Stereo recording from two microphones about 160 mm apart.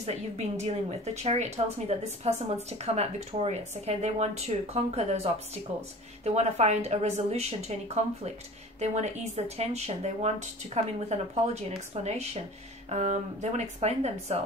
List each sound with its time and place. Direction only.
0.0 s speech: 45° right (ahead or behind)